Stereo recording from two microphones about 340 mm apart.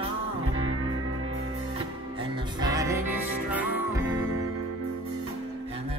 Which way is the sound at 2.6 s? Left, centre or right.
Centre.